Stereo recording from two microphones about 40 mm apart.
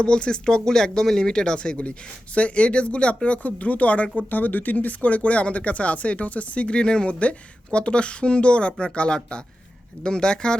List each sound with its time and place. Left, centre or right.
0.0 s speech: left
4.3 s speech: left